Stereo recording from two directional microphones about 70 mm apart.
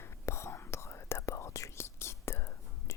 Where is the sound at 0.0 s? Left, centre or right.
Left.